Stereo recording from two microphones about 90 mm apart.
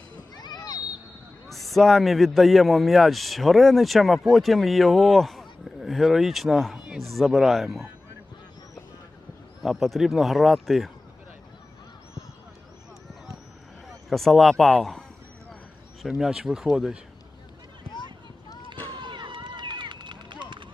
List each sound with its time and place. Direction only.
0.3 s a sound: 50° left (ahead or behind)
1.5 s a man's voice: centre (ahead or behind)
9.6 s a man's voice: centre (ahead or behind)
13.8 s a sound: 5° left (ahead or behind)
14.6 s a man's voice: centre (ahead or behind)
16.0 s a man's voice: 5° right (ahead or behind)
19.0 s run: 60° right (ahead or behind)